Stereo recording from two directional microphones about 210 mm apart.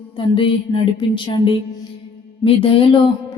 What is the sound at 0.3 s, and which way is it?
Music, 25° left (ahead or behind).